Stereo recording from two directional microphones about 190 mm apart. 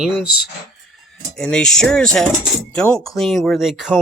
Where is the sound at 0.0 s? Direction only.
Centre (ahead or behind).